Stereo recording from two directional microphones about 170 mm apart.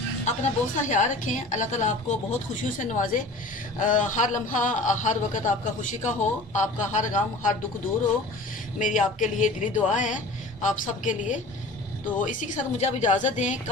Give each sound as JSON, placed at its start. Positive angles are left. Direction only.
{"t": 0.2, "sound": "a man's voice", "side_deg": 45}
{"t": 8.7, "sound": "a man's voice", "side_deg": 50}